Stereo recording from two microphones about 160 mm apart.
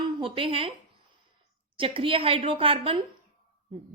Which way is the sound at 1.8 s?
35° right (ahead or behind).